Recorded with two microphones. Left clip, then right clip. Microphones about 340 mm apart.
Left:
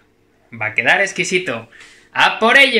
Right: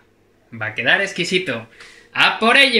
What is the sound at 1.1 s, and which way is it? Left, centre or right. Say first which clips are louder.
Speech: left 2 dB; centre.